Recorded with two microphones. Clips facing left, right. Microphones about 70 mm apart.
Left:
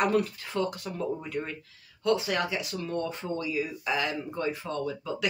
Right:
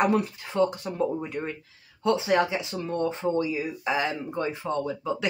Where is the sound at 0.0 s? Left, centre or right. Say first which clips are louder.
Right 2 dB; centre.